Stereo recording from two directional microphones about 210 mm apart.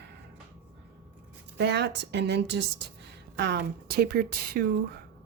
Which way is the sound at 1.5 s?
55° right (ahead or behind).